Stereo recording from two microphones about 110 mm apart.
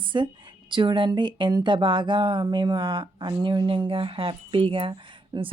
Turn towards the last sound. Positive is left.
turn(degrees=-50)  # may be behind; listen again after turning